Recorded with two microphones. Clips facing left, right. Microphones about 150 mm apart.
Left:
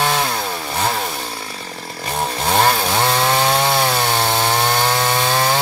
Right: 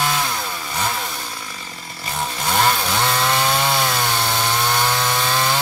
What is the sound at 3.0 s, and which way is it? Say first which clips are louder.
Wood: left 3 dB; 25° left (ahead or behind).